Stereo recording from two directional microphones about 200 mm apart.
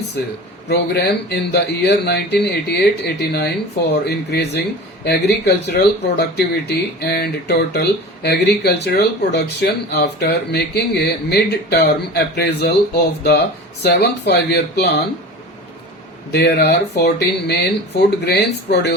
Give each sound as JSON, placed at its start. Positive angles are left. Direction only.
{"t": 0.7, "sound": "speech", "side_deg": 55}
{"t": 16.3, "sound": "speech", "side_deg": 55}